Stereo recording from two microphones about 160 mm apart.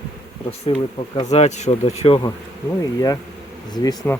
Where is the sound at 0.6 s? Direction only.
35° left (ahead or behind).